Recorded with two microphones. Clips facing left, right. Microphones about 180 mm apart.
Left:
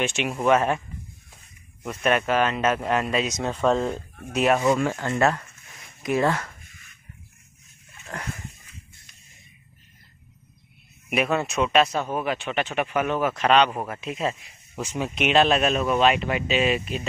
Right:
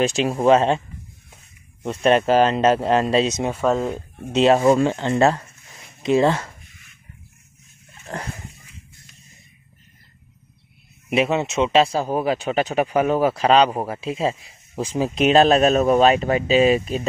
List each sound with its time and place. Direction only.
0.0 s speech: 35° right (ahead or behind)
3.4 s speech: 5° right (ahead or behind)
4.2 s speech: 25° right (ahead or behind)
8.1 s dog: 30° right (ahead or behind)
11.1 s speech: 25° right (ahead or behind)